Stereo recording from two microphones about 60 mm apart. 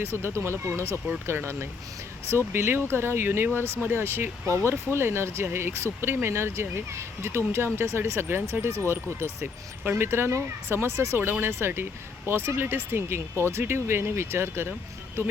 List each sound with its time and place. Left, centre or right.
0.0 s speech: right